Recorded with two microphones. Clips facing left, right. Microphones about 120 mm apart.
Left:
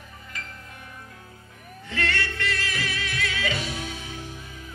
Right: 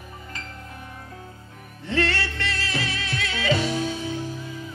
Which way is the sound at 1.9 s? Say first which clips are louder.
Right 4 dB; 30° right (ahead or behind).